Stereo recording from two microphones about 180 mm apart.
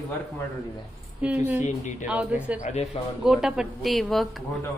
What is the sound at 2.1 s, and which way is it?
Speech, 10° right (ahead or behind).